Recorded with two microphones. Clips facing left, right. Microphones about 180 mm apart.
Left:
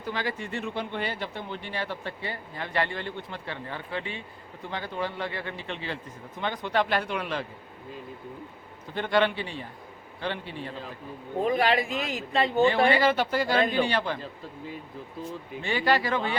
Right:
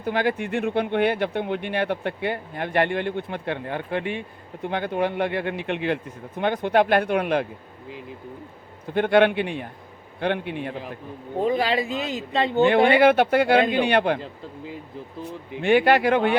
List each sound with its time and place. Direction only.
0.0 s speech: 55° right (ahead or behind)
8.9 s speech: 55° right (ahead or behind)
11.3 s speech: 25° right (ahead or behind)
12.5 s speech: 65° right (ahead or behind)
15.6 s speech: 60° right (ahead or behind)